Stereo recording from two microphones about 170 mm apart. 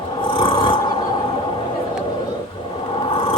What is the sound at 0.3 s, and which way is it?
Filing, 30° left (ahead or behind).